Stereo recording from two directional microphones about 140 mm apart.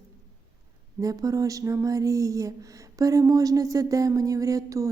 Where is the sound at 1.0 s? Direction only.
25° right (ahead or behind).